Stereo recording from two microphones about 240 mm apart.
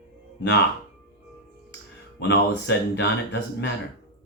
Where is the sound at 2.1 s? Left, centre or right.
Left.